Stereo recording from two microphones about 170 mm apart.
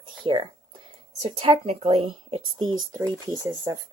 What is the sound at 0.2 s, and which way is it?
Speech, 30° right (ahead or behind).